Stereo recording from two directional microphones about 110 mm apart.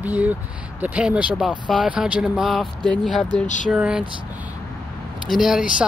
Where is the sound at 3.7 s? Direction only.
10° right (ahead or behind).